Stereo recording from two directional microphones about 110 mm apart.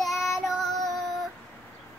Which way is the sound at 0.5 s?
Centre (ahead or behind).